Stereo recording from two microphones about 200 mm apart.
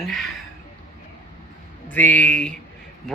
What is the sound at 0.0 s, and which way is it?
Speech, centre (ahead or behind).